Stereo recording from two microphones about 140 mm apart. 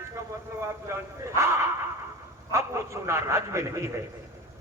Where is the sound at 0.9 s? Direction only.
20° right (ahead or behind).